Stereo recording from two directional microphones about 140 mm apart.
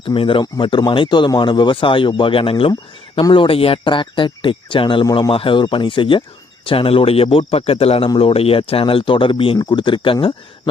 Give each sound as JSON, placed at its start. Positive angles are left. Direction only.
{"t": 0.0, "sound": "speech", "side_deg": 40}
{"t": 5.0, "sound": "a man's voice", "side_deg": 25}
{"t": 5.3, "sound": "speech", "side_deg": 40}